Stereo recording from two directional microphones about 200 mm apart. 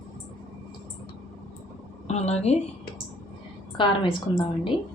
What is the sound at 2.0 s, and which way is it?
Speech, 35° left (ahead or behind).